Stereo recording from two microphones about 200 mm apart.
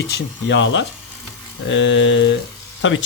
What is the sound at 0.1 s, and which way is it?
Speech, 60° left (ahead or behind).